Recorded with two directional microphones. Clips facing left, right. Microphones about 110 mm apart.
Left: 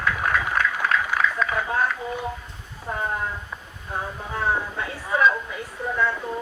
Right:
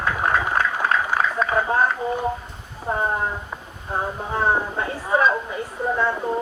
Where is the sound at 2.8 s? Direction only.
30° right (ahead or behind).